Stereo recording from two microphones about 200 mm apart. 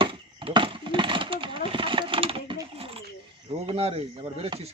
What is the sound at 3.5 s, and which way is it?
Speech, 30° right (ahead or behind).